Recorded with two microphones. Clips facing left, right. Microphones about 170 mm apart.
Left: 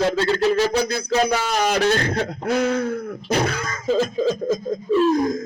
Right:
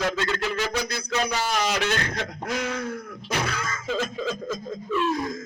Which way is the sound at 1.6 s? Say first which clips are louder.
Left 6 dB; 55° left (ahead or behind).